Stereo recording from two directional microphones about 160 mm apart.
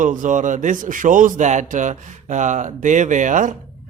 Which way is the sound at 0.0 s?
55° right (ahead or behind).